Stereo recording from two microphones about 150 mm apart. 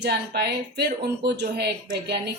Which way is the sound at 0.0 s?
90° right.